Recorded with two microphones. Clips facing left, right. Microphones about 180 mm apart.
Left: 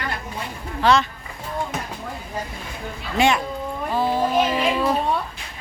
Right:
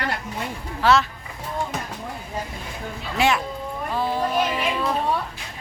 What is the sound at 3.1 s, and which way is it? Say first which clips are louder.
A woman's voice: left 2 dB; centre (ahead or behind).